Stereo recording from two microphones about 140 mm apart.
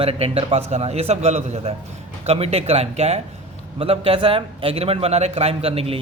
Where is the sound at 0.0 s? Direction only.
45° right (ahead or behind).